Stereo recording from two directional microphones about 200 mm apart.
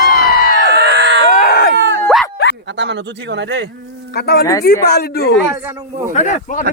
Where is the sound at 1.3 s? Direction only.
40° left (ahead or behind).